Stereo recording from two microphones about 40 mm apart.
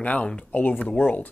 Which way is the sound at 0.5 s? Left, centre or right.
Left.